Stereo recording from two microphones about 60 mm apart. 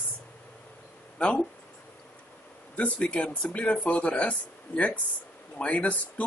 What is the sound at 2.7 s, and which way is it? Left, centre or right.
Speech, left.